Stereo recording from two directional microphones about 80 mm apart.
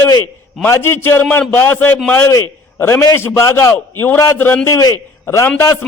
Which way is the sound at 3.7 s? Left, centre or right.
Left.